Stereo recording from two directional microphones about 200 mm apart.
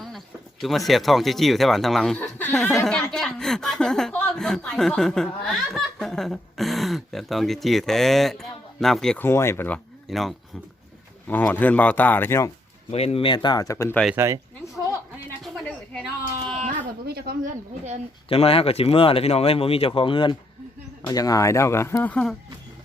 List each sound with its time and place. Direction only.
0.6 s speech: centre (ahead or behind)
12.9 s speech: 30° left (ahead or behind); by 14.0 s 15° left (ahead or behind)
15.4 s a sound: centre (ahead or behind)
17.1 s speech: 50° right (ahead or behind)
18.3 s speech: 30° left (ahead or behind); by 22.4 s 5° left (ahead or behind)